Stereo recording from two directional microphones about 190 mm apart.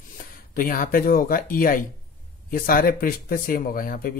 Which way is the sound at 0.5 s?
50° left (ahead or behind).